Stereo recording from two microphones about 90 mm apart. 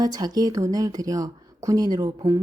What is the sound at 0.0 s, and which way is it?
A woman's voice, 45° right (ahead or behind).